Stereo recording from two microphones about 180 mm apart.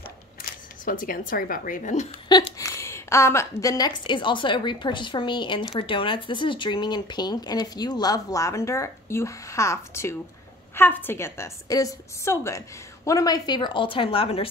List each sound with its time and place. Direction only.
0.4 s speech: 50° left (ahead or behind)
2.3 s a woman's voice: 25° left (ahead or behind)